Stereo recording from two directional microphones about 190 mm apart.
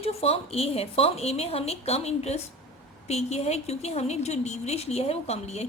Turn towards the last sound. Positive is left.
turn(degrees=35)  # may be behind; listen again after turning